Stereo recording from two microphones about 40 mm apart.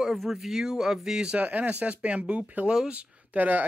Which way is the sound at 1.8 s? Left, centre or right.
Right.